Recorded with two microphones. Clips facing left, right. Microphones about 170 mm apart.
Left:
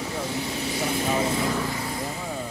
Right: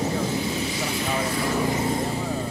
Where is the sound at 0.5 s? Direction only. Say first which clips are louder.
Even; 55° left (ahead or behind).